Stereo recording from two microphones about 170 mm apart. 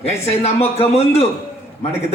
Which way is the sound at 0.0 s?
40° left (ahead or behind).